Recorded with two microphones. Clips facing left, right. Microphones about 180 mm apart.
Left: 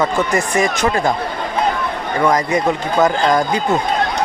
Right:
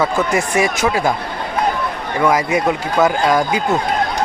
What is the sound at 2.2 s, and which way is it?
Speech, 5° right (ahead or behind).